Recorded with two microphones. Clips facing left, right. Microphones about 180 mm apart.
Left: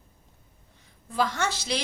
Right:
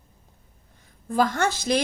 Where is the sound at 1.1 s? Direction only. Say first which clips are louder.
Right 5 dB; 50° right (ahead or behind).